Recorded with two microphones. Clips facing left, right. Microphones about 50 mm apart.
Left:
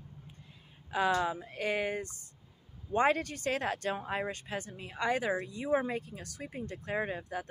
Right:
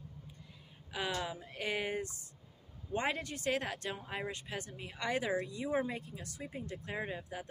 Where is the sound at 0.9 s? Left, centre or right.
Left.